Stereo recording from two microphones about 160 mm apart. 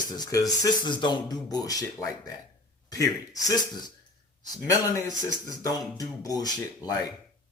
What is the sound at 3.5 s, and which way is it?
Speech, 25° left (ahead or behind).